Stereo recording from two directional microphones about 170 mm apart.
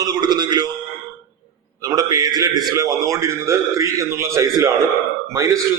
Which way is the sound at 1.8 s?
20° right (ahead or behind).